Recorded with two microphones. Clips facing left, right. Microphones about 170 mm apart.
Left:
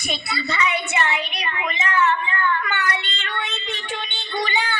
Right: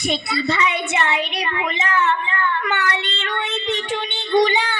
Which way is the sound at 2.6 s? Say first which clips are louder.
Right 3 dB; 75° right (ahead or behind).